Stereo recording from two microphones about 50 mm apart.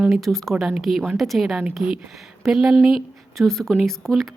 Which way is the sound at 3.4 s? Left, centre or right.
Centre.